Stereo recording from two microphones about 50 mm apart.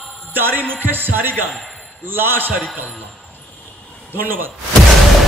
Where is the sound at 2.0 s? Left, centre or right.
Right.